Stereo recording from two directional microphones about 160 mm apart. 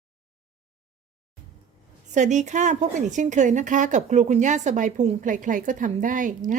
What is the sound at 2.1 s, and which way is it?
A woman's voice, 50° right (ahead or behind).